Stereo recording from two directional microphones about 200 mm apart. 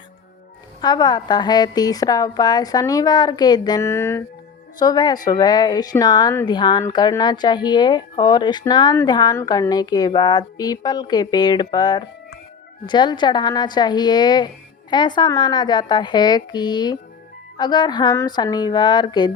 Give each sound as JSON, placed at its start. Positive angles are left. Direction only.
{"t": 0.8, "sound": "a woman's voice", "side_deg": 20}